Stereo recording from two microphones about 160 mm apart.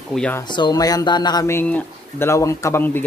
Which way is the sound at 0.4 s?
30° left (ahead or behind).